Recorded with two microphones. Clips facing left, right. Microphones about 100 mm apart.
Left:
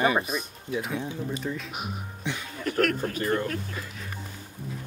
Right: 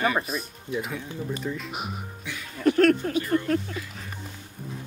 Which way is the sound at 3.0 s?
45° left (ahead or behind).